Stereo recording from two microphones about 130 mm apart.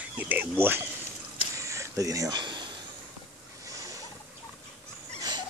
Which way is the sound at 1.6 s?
25° right (ahead or behind).